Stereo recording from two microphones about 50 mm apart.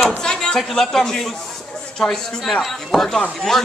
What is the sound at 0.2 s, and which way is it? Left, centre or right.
A man's voice, centre.